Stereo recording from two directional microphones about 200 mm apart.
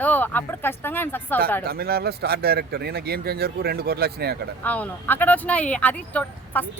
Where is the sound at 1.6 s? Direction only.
50° right (ahead or behind).